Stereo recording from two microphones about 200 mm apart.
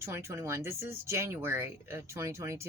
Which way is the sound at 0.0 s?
15° right (ahead or behind).